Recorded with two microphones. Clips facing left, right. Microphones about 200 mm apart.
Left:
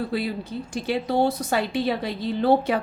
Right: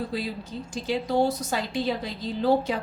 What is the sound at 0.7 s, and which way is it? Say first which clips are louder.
A woman's voice: left 1 dB; 60° left (ahead or behind).